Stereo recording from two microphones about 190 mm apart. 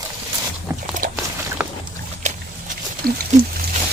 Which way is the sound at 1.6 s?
10° right (ahead or behind).